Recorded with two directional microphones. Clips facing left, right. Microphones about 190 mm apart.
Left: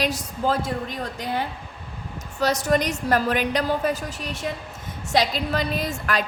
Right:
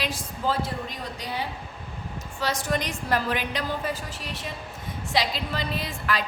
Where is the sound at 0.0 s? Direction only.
40° left (ahead or behind).